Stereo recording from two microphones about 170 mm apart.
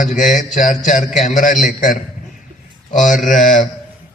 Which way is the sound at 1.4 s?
50° left (ahead or behind).